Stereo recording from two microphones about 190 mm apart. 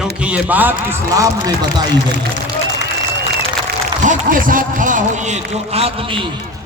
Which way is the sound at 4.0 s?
45° right (ahead or behind).